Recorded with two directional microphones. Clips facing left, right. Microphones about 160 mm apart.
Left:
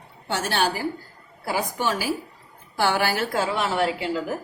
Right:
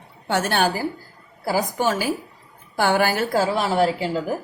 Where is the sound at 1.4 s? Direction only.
40° right (ahead or behind).